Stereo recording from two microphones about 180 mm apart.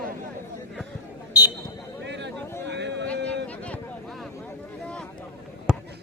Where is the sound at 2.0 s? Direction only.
75° right (ahead or behind).